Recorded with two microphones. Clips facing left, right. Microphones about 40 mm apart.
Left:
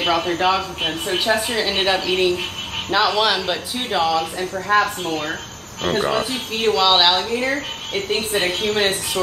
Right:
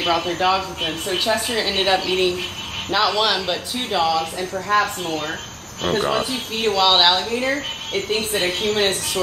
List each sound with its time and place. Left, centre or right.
0.0 s speech: centre